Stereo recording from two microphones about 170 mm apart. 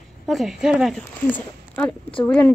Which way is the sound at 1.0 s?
10° left (ahead or behind).